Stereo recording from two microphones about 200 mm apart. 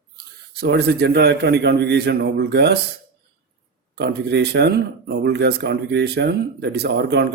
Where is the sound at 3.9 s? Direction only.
60° right (ahead or behind).